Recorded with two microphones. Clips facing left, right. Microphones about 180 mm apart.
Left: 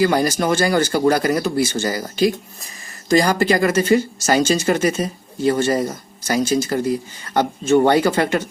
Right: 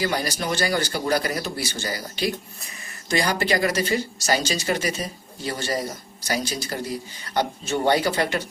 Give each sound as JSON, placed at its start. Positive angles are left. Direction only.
{"t": 0.0, "sound": "speech", "side_deg": 50}